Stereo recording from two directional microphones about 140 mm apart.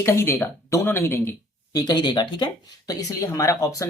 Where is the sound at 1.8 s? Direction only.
30° left (ahead or behind).